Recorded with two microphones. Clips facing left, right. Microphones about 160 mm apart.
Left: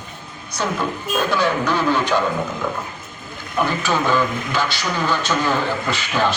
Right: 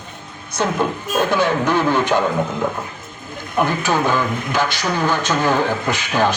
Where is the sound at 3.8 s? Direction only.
15° right (ahead or behind).